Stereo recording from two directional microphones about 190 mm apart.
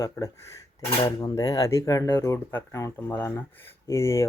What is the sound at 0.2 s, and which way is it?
Speech, 10° left (ahead or behind).